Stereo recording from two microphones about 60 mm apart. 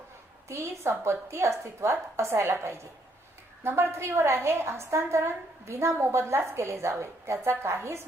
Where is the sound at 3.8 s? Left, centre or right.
Right.